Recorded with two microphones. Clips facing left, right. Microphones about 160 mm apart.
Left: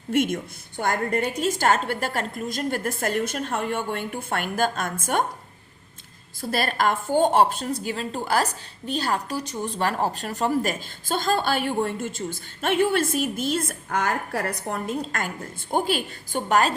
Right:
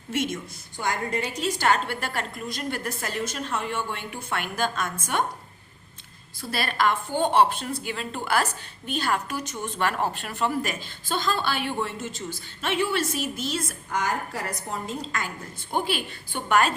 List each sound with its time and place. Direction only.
0.1 s a woman's voice: 55° left (ahead or behind)
6.4 s a woman's voice: 45° left (ahead or behind)